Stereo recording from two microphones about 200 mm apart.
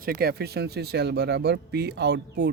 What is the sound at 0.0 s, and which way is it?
Speech, 45° right (ahead or behind).